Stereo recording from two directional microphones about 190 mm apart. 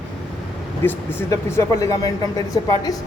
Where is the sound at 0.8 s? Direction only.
10° left (ahead or behind).